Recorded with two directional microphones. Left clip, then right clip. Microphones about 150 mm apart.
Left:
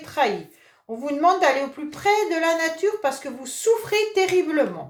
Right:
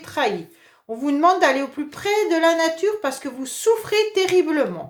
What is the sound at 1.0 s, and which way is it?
A woman's voice, 45° right (ahead or behind).